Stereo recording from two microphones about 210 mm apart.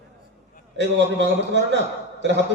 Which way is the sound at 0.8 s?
55° right (ahead or behind).